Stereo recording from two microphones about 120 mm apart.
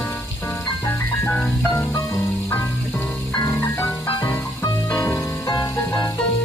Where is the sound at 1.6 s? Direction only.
25° left (ahead or behind).